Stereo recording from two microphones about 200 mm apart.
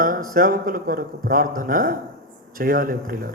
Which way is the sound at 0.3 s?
45° right (ahead or behind).